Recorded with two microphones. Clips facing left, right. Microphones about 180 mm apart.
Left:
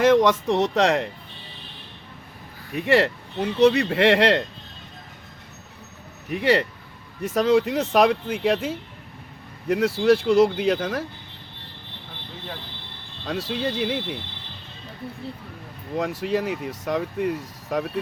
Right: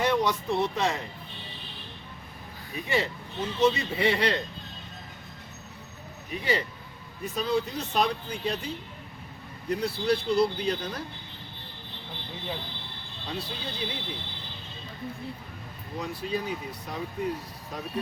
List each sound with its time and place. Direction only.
0.0 s speech: 90° left
2.7 s speech: 75° left (ahead or behind)
6.3 s speech: 75° left (ahead or behind)
7.2 s speech: 90° left
13.2 s speech: 85° left
16.0 s speech: 90° left